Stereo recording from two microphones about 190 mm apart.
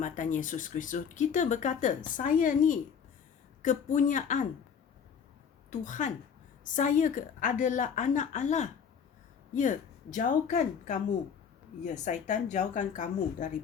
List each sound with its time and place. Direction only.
0.0 s a woman's voice: 40° left (ahead or behind)
5.7 s a woman's voice: 40° left (ahead or behind)